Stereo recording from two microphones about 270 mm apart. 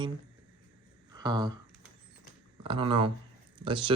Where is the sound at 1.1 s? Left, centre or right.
Centre.